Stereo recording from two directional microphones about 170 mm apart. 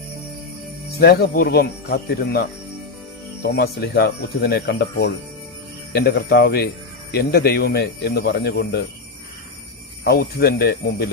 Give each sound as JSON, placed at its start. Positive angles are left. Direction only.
{"t": 0.9, "sound": "speech", "side_deg": 65}
{"t": 3.4, "sound": "speech", "side_deg": 70}
{"t": 10.0, "sound": "speech", "side_deg": 70}